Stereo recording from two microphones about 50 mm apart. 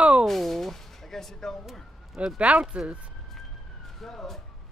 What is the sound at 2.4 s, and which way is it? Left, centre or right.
Speech, right.